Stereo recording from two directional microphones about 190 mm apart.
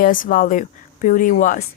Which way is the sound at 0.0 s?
45° left (ahead or behind).